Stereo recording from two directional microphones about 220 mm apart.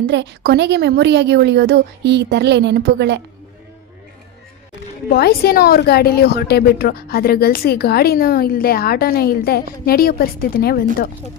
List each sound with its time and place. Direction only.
0.1 s a woman's voice: 50° right (ahead or behind)
5.1 s a woman's voice: 45° left (ahead or behind)